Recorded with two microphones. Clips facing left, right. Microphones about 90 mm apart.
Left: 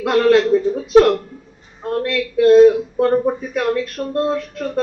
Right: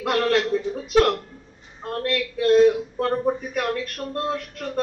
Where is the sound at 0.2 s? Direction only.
40° left (ahead or behind).